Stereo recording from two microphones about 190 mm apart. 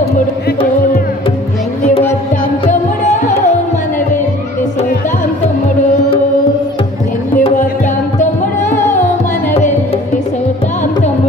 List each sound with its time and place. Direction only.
2.6 s music: 40° left (ahead or behind)
7.3 s music: 40° left (ahead or behind)